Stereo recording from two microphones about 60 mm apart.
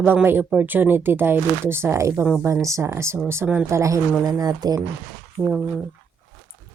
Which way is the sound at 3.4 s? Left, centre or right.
Right.